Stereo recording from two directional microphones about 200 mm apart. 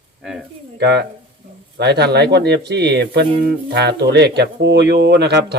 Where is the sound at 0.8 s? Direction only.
55° right (ahead or behind).